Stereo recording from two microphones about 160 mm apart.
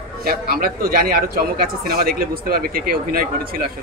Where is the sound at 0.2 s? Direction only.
70° right (ahead or behind).